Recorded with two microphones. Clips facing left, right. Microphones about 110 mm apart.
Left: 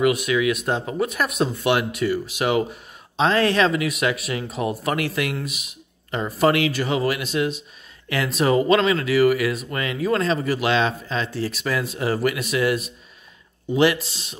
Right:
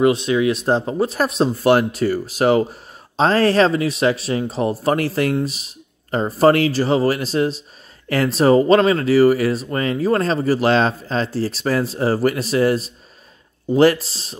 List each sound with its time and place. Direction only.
0.0 s speech: 30° right (ahead or behind)